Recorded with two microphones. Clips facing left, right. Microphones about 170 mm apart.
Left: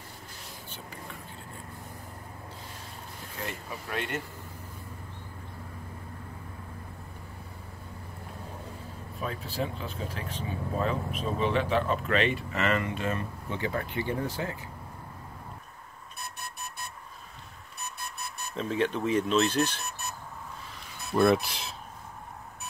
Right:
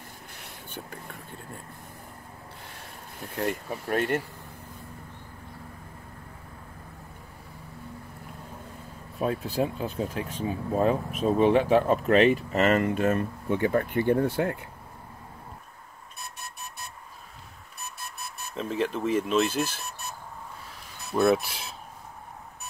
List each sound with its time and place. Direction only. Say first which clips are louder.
3.4 s speech: right 9 dB; 50° right (ahead or behind)
9.2 s speech: right 7 dB; 50° right (ahead or behind)
18.5 s speech: even; centre (ahead or behind)